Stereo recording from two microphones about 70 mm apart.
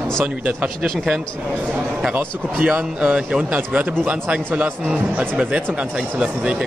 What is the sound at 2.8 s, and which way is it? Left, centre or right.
Speech, centre.